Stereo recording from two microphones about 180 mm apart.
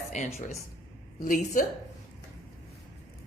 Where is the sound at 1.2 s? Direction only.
50° left (ahead or behind).